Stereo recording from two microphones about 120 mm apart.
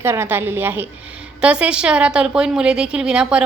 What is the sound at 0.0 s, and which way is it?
A woman's voice, 20° right (ahead or behind).